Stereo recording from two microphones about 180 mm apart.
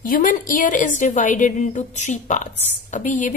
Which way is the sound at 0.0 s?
45° left (ahead or behind).